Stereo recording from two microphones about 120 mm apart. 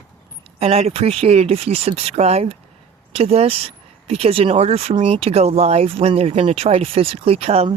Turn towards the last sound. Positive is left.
turn(degrees=-55)  # may be behind; listen again after turning